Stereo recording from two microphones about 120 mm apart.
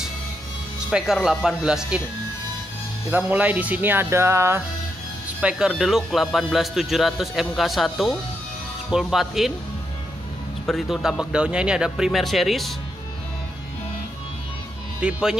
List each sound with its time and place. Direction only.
0.8 s a man's voice: 5° right (ahead or behind)
3.1 s speech: 15° right (ahead or behind)
5.4 s a man's voice: 5° right (ahead or behind)
10.7 s a man's voice: 5° right (ahead or behind)
15.0 s speech: 10° right (ahead or behind)